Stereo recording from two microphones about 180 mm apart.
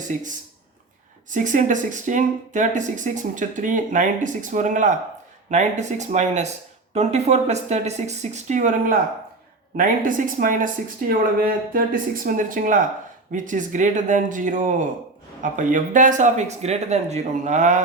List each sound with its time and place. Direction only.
0.1 s speech: 45° right (ahead or behind)